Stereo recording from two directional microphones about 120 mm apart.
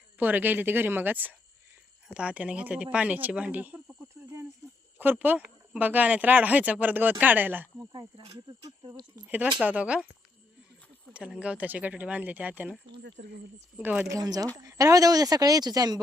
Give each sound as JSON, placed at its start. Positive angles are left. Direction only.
{"t": 0.2, "sound": "speech", "side_deg": -15}
{"t": 7.9, "sound": "speech", "side_deg": -40}
{"t": 9.1, "sound": "speech", "side_deg": -15}
{"t": 11.1, "sound": "speech", "side_deg": -10}
{"t": 13.7, "sound": "speech", "side_deg": -10}
{"t": 14.1, "sound": "speech", "side_deg": -30}